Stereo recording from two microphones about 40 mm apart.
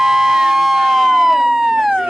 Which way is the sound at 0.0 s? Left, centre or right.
Centre.